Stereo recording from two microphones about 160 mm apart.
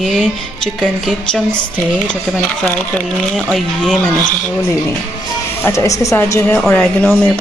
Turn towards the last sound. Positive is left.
turn(degrees=10)  # may be behind; listen again after turning